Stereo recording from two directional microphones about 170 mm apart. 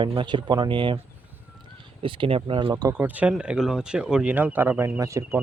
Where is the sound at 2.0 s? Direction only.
30° right (ahead or behind).